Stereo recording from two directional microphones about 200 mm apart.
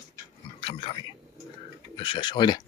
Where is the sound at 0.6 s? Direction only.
25° left (ahead or behind).